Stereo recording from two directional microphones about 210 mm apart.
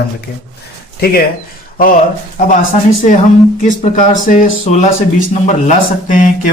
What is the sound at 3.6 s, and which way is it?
Speech, 40° left (ahead or behind).